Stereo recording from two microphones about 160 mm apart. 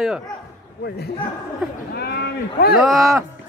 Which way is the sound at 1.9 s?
85° left.